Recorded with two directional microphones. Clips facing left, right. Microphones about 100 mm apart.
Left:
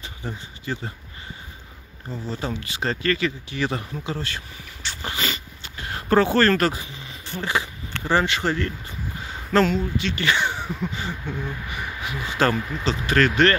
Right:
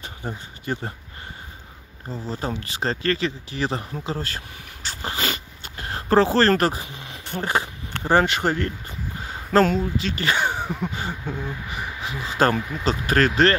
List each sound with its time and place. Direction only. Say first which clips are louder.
0.0 s speech: right 1 dB; 45° right (ahead or behind)
2.2 s speech: even; 40° right (ahead or behind)
4.8 s a sound: right 1 dB; 40° right (ahead or behind)
5.3 s zipper: right 1 dB; 45° right (ahead or behind)
6.9 s a sound: right 2 dB; 55° right (ahead or behind); by 9.8 s 40° right (ahead or behind)
9.9 s speech: even; 35° right (ahead or behind)
12.0 s speech: even; 30° right (ahead or behind)
12.8 s speech: even; 40° right (ahead or behind)